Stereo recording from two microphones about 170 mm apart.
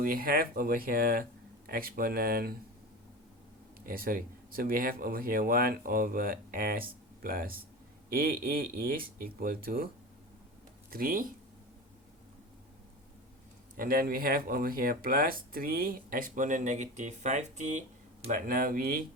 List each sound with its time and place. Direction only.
0.0 s speech: 60° right (ahead or behind)
3.8 s speech: 60° right (ahead or behind)
10.9 s speech: 55° right (ahead or behind)
13.7 s speech: 60° right (ahead or behind)